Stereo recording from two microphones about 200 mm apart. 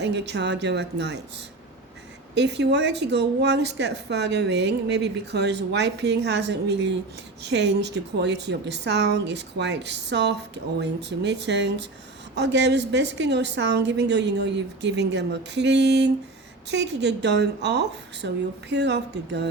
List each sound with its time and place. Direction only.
0.0 s speech: 60° right (ahead or behind)
2.3 s speech: 60° right (ahead or behind)